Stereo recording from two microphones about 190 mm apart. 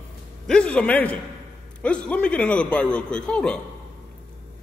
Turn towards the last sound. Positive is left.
turn(degrees=5)  # may be behind; listen again after turning